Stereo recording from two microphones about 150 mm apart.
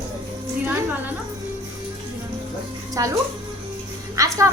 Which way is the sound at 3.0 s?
25° right (ahead or behind).